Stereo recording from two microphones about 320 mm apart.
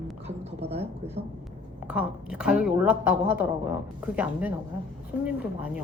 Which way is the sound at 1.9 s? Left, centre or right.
Centre.